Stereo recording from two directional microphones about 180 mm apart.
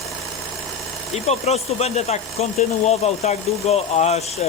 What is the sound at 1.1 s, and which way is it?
Speech, 35° left (ahead or behind).